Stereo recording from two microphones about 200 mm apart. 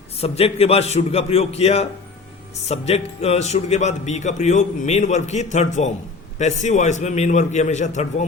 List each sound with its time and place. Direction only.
0.2 s speech: 30° left (ahead or behind)